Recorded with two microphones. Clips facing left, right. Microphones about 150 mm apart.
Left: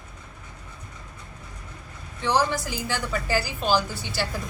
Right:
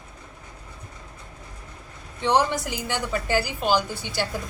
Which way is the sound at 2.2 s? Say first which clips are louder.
Right 2 dB; 20° right (ahead or behind).